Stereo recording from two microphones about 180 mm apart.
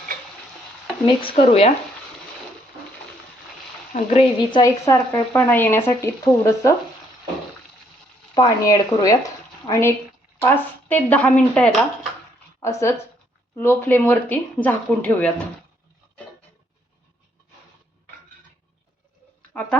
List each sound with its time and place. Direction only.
1.0 s speech: 30° left (ahead or behind)
3.9 s speech: 35° left (ahead or behind)
4.9 s speech: 10° left (ahead or behind)
8.4 s a woman's voice: 20° left (ahead or behind)